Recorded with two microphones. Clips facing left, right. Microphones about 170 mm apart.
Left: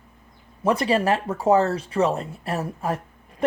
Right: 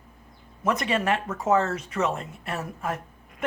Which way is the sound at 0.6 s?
30° left (ahead or behind).